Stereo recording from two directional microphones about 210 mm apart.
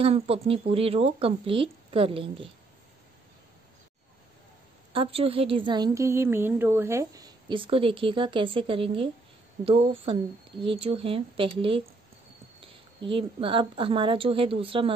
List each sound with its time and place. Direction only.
0.0 s a woman's voice: 30° right (ahead or behind)
4.9 s a woman's voice: 25° right (ahead or behind)